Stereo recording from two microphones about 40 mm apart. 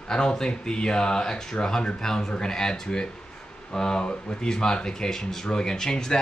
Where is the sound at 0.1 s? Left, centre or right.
Centre.